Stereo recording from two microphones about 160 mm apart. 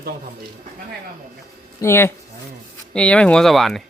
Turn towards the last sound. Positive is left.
turn(degrees=0)  # may be behind; listen again after turning